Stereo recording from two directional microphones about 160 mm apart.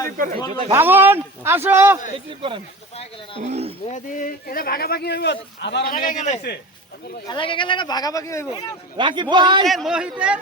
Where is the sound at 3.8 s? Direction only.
50° left (ahead or behind).